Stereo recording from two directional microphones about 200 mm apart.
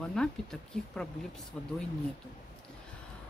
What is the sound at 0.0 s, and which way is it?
Speech, 5° left (ahead or behind).